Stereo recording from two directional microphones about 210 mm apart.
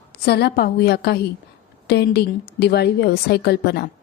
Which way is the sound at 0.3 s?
50° left (ahead or behind).